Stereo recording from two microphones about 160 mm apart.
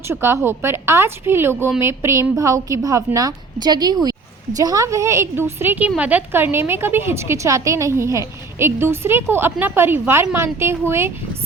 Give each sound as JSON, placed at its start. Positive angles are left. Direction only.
{"t": 0.1, "sound": "a woman's voice", "side_deg": -15}